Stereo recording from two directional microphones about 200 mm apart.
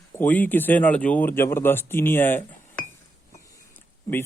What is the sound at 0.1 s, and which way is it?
Speech, 10° left (ahead or behind).